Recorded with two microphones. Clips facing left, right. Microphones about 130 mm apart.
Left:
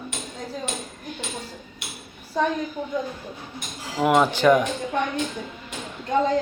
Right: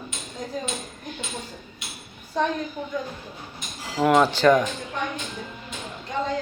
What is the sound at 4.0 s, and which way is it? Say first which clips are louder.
Speech: even; 10° left (ahead or behind).